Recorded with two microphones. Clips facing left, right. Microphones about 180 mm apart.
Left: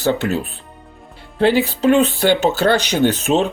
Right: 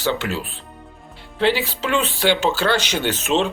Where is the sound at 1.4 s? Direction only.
50° left (ahead or behind).